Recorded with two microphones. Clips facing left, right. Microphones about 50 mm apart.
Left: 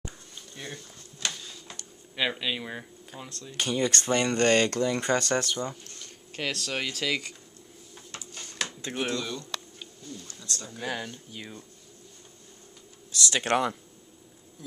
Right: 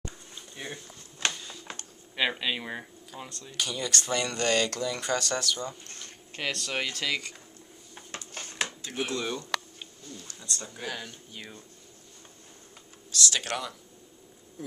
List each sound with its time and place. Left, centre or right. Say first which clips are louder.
0.6 s speech: right 1 dB; centre
2.1 s speech: even; centre
3.5 s speech: left 4 dB; left
6.3 s speech: even; centre
8.3 s a sound: right 2 dB; right
8.8 s speech: left 2 dB; left
9.1 s a sound: right 2 dB; right
10.4 s speech: even; centre
10.9 s speech: left 5 dB; centre
13.3 s speech: left 7 dB; left